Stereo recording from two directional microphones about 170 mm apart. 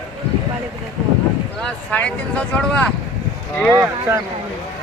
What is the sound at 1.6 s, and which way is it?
Speech, 5° left (ahead or behind).